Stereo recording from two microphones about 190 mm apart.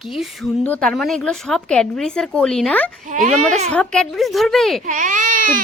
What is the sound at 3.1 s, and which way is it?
Speech, 40° right (ahead or behind).